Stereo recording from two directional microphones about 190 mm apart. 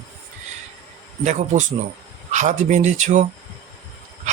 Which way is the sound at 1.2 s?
40° right (ahead or behind).